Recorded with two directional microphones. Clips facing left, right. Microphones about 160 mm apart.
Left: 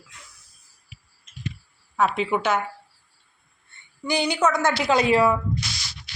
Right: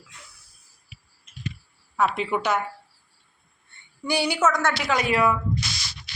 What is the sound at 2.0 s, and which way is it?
Speech, centre (ahead or behind).